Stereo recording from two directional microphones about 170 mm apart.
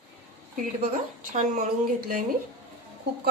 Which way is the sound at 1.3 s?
55° right (ahead or behind).